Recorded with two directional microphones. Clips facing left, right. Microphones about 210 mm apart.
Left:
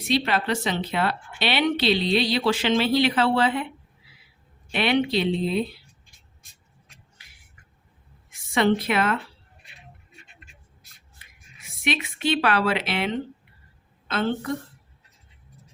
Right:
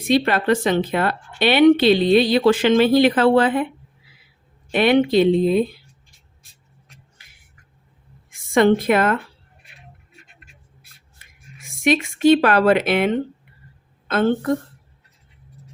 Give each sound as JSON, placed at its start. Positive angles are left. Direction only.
{"t": 0.0, "sound": "a woman's voice", "side_deg": -50}
{"t": 4.7, "sound": "a woman's voice", "side_deg": -50}
{"t": 8.3, "sound": "a woman's voice", "side_deg": -50}
{"t": 11.2, "sound": "a woman's voice", "side_deg": -45}